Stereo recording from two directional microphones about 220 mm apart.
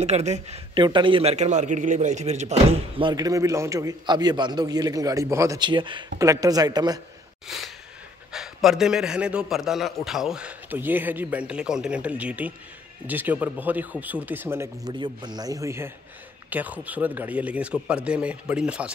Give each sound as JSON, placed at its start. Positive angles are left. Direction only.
{"t": 0.0, "sound": "speech", "side_deg": -30}
{"t": 7.4, "sound": "a man's voice", "side_deg": 0}